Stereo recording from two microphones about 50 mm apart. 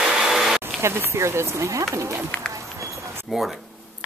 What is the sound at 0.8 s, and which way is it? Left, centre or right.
Speech, right.